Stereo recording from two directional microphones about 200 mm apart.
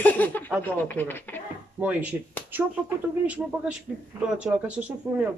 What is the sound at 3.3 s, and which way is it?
Speech, 5° right (ahead or behind).